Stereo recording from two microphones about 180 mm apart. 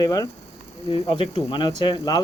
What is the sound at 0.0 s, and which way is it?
Speech, 20° left (ahead or behind).